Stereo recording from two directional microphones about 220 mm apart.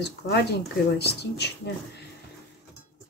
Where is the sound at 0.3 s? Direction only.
50° left (ahead or behind).